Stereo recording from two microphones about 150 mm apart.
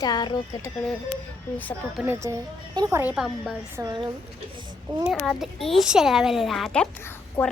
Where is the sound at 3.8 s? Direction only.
15° right (ahead or behind).